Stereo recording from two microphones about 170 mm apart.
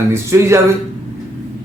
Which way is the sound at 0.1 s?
15° right (ahead or behind).